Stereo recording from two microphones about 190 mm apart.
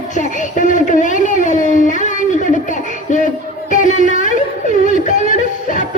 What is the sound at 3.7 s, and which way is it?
Music, 40° left (ahead or behind).